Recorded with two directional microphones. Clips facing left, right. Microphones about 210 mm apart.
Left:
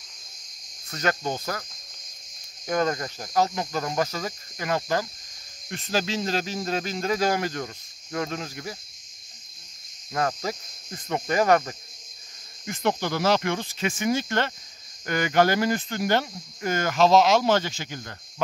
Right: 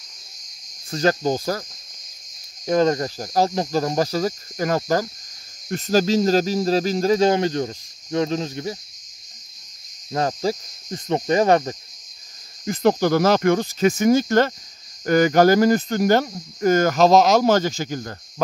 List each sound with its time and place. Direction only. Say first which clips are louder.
0.8 s speech: right 7 dB; 30° right (ahead or behind)
2.6 s speech: right 7 dB; 25° right (ahead or behind)
10.1 s cricket: right 5 dB; 30° right (ahead or behind)
12.6 s speech: right 8 dB; 35° right (ahead or behind)